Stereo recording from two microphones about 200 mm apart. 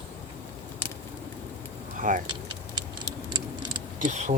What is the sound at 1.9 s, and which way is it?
Vehicle, 40° right (ahead or behind).